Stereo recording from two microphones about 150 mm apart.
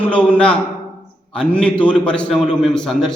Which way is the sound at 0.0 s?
10° left (ahead or behind).